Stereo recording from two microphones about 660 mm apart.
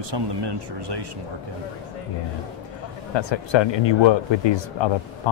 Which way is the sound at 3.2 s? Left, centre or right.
Left.